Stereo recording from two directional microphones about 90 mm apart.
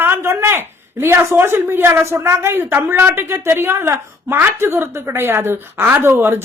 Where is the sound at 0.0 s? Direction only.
25° right (ahead or behind).